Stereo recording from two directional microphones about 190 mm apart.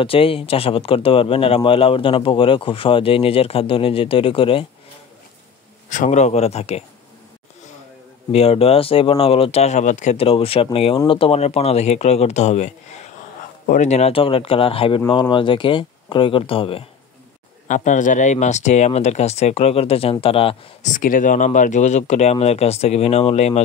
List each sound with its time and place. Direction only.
0.0 s speech: 30° left (ahead or behind)
5.9 s speech: 40° left (ahead or behind)
8.3 s speech: 30° left (ahead or behind)
17.6 s speech: 40° left (ahead or behind)
20.9 s speech: 45° left (ahead or behind)